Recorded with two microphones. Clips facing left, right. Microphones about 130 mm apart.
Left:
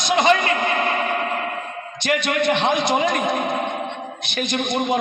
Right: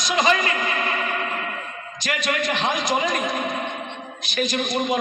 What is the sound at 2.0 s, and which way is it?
A man's voice, 60° left (ahead or behind).